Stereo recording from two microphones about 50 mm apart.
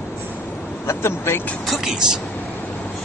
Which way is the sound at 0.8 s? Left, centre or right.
Left.